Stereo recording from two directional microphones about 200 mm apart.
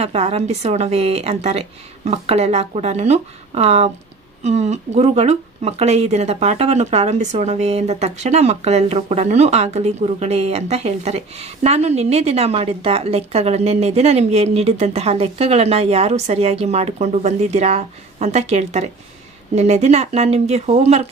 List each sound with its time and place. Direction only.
0.0 s speech: 30° right (ahead or behind)